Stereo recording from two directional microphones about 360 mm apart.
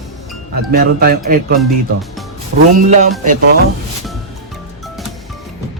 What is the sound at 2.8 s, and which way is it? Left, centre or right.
Speech, centre.